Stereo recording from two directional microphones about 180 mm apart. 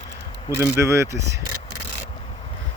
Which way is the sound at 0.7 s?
15° right (ahead or behind).